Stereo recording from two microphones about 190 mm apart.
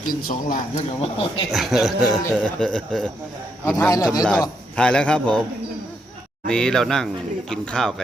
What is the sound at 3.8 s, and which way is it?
Speech, 20° left (ahead or behind).